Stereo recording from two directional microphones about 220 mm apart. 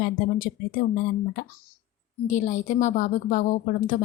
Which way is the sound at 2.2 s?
35° left (ahead or behind).